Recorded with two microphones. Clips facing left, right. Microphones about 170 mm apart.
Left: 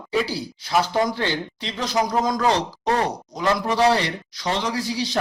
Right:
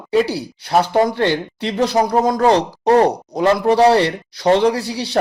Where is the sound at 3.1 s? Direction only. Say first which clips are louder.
Right 7 dB; 60° right (ahead or behind).